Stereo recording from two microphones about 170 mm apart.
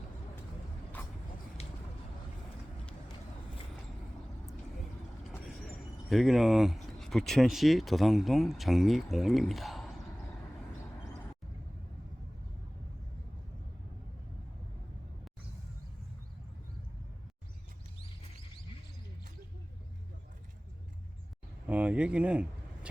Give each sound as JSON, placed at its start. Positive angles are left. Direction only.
{"t": 1.6, "sound": "vehicle", "side_deg": 35}
{"t": 6.1, "sound": "speech", "side_deg": 0}
{"t": 21.7, "sound": "a sound", "side_deg": -10}